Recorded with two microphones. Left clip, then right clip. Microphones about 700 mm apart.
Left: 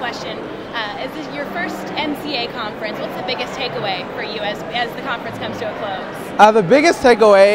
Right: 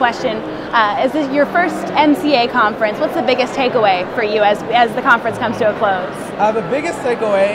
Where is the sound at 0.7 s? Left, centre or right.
Right.